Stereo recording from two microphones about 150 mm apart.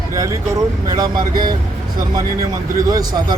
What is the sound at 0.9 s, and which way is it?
Speech, 25° right (ahead or behind).